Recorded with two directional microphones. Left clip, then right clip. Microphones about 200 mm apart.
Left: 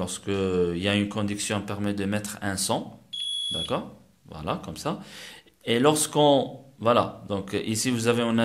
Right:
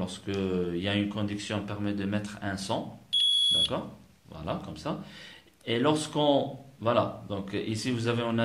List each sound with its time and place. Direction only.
0.0 s speech: 45° left (ahead or behind)